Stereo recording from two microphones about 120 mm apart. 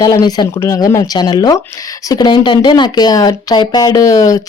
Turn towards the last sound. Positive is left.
turn(degrees=30)  # may be behind; listen again after turning